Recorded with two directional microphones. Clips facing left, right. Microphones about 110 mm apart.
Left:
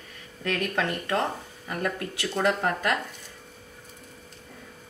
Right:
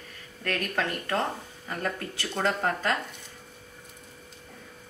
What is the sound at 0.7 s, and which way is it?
Speech, 20° left (ahead or behind).